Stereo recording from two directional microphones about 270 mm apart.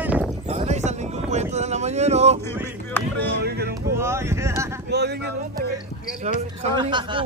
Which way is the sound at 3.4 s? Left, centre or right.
Right.